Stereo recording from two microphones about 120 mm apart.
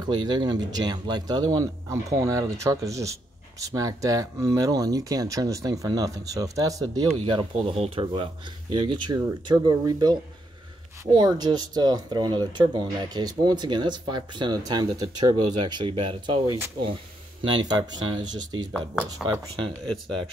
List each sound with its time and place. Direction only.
0.0 s speech: 40° right (ahead or behind)
7.2 s speech: 45° right (ahead or behind)
11.1 s speech: 35° right (ahead or behind)